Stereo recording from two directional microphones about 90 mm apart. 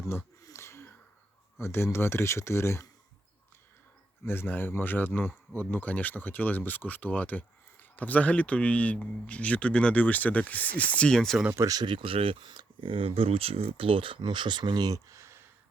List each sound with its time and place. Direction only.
0.4 s wheeze: 30° left (ahead or behind)
1.5 s speech: 25° left (ahead or behind)
4.3 s speech: 25° left (ahead or behind); by 11.3 s 5° left (ahead or behind)
11.5 s speech: 40° right (ahead or behind)
11.9 s speech: 75° right (ahead or behind)
12.5 s speech: 65° right (ahead or behind); by 15.4 s 30° right (ahead or behind)